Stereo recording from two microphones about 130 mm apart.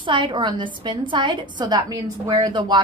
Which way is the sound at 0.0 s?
40° right (ahead or behind).